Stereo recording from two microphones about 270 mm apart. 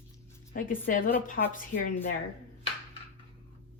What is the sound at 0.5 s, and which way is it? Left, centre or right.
A woman's voice, left.